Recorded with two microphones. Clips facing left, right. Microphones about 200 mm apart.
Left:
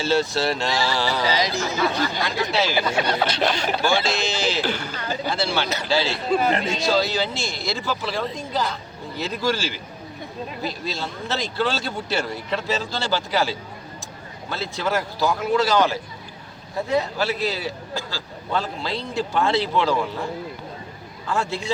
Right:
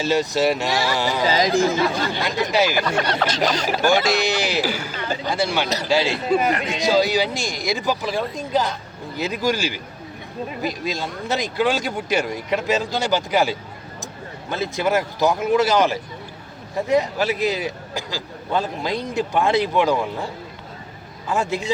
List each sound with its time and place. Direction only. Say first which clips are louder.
0.0 s a man's voice: right 2 dB; 15° right (ahead or behind)
1.3 s speech: right 5 dB; 50° right (ahead or behind)
1.9 s a man's voice: right 1 dB; 15° right (ahead or behind)
2.8 s speech: right 1 dB; 10° left (ahead or behind)
3.8 s a man's voice: right 5 dB; 15° right (ahead or behind)
5.6 s speech: right 3 dB; 35° right (ahead or behind)
5.9 s a man's voice: right 3 dB; 15° right (ahead or behind)
6.5 s speech: even; 30° left (ahead or behind)
6.7 s a man's voice: right 3 dB; 15° right (ahead or behind)
21.2 s a man's voice: right 3 dB; 20° right (ahead or behind)